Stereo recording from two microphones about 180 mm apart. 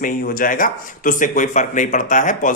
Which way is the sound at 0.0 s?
50° left (ahead or behind).